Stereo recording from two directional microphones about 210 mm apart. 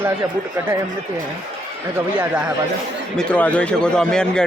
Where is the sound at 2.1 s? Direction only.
5° right (ahead or behind).